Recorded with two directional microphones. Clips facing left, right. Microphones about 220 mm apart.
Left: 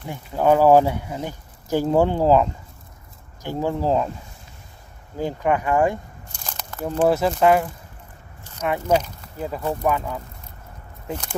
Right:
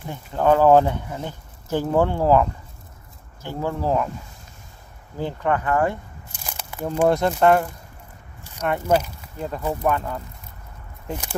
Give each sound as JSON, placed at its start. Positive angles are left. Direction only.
{"t": 0.1, "sound": "speech", "side_deg": 10}
{"t": 5.1, "sound": "speech", "side_deg": 15}
{"t": 6.3, "sound": "crumpling", "side_deg": -10}
{"t": 7.1, "sound": "speech", "side_deg": 5}
{"t": 8.5, "sound": "biting", "side_deg": -10}
{"t": 8.8, "sound": "speech", "side_deg": -5}
{"t": 9.4, "sound": "speech", "side_deg": 5}